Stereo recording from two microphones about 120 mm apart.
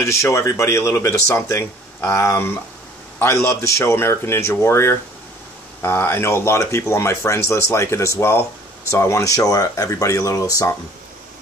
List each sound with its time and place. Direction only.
0.0 s speech: 25° left (ahead or behind)